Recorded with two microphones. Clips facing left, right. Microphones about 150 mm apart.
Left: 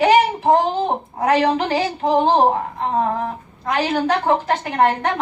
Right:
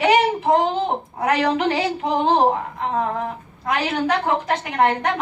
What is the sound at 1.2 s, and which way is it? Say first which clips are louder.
A woman's voice: left 3 dB; 30° left (ahead or behind).